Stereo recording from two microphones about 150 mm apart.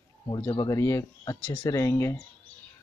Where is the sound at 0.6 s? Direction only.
20° left (ahead or behind).